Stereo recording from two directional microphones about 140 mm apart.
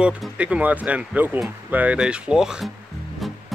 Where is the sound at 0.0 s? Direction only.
10° right (ahead or behind).